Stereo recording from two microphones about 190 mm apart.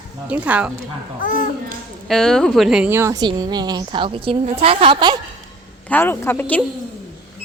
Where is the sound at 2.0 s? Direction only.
Centre (ahead or behind); by 5.2 s 25° right (ahead or behind).